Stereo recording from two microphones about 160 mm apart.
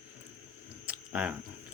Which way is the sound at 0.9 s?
10° right (ahead or behind).